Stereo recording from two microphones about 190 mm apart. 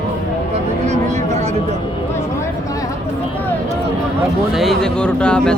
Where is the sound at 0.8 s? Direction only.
35° right (ahead or behind).